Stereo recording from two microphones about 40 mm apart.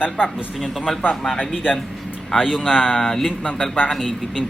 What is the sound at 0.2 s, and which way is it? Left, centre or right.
Speech, centre.